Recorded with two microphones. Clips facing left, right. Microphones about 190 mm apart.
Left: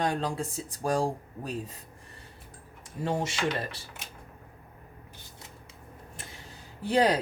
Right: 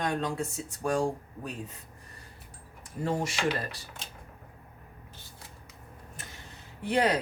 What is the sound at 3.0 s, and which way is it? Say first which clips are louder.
Speech: even; 25° left (ahead or behind).